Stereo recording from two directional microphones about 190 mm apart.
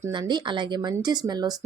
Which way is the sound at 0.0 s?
25° right (ahead or behind).